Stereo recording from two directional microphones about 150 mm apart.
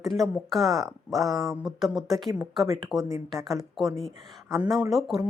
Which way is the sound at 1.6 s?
Centre (ahead or behind).